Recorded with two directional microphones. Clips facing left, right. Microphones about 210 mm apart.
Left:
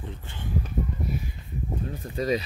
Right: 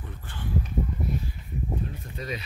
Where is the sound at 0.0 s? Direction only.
20° left (ahead or behind).